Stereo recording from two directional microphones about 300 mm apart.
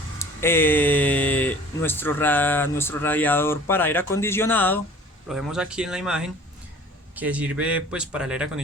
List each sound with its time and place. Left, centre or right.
0.2 s speech: centre